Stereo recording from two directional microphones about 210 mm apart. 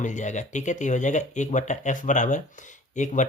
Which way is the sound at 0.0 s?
35° left (ahead or behind).